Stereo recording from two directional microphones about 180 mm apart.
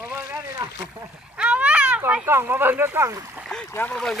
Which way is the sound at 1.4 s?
5° right (ahead or behind).